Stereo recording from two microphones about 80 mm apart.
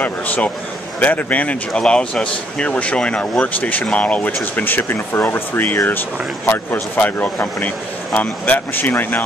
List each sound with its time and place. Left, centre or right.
0.0 s a man's voice: left